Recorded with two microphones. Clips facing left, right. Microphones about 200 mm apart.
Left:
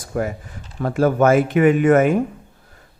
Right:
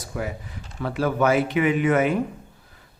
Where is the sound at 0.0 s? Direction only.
50° left (ahead or behind).